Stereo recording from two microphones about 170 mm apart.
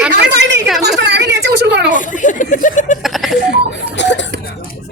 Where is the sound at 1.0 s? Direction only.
90° right.